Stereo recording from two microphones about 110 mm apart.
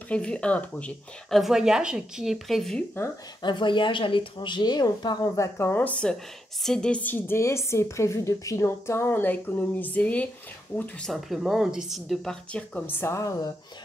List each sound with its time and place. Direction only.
0.1 s speech: 10° left (ahead or behind)
1.4 s a woman's voice: 5° right (ahead or behind)
3.4 s a woman's voice: 45° left (ahead or behind); by 10.9 s 20° left (ahead or behind)
11.1 s a woman's voice: centre (ahead or behind)
12.5 s a woman's voice: 15° left (ahead or behind)